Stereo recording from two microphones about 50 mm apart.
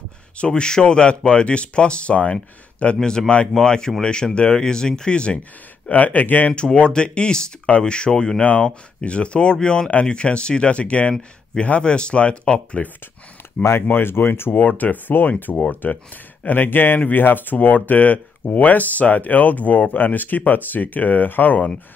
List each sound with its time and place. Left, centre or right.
0.4 s speech: centre
5.9 s speech: left
6.5 s speech: centre
13.9 s speech: left
14.5 s speech: left